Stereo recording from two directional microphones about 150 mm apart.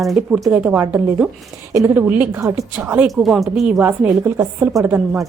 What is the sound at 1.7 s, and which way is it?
Speech, 20° right (ahead or behind).